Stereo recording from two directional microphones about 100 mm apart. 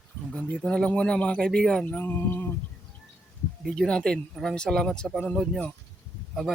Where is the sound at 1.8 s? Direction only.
20° left (ahead or behind).